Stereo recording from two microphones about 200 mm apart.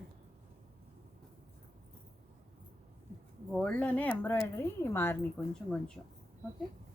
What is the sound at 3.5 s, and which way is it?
Speech, 5° left (ahead or behind).